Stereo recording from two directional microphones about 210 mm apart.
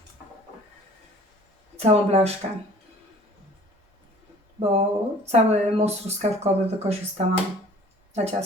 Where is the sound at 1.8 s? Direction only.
30° right (ahead or behind).